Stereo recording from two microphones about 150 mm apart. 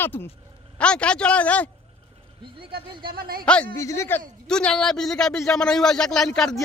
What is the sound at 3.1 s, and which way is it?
Speech, 80° right.